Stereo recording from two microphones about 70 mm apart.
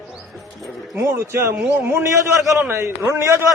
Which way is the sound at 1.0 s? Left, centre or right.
Right.